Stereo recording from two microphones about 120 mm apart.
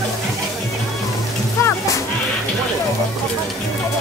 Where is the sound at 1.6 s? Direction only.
25° left (ahead or behind).